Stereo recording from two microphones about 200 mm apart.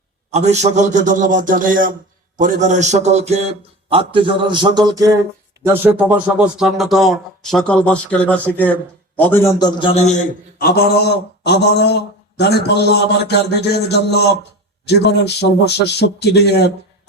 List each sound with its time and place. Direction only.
0.3 s a man's voice: 35° right (ahead or behind); by 10.2 s 30° left (ahead or behind)
10.6 s a man's voice: 50° left (ahead or behind)